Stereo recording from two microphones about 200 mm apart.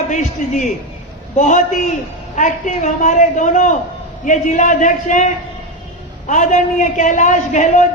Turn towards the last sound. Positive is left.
turn(degrees=35)  # may be behind; listen again after turning